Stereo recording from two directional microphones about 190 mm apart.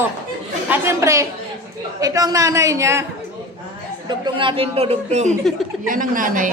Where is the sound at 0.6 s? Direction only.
10° right (ahead or behind).